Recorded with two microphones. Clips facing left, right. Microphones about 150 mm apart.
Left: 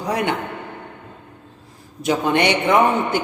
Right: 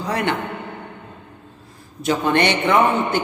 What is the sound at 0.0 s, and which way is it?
Speech, 15° left (ahead or behind).